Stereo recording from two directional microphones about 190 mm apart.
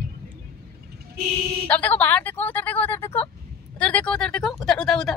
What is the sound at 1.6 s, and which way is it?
Speech, 10° left (ahead or behind).